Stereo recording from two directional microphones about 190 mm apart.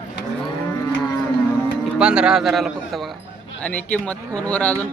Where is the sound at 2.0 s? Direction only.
5° right (ahead or behind).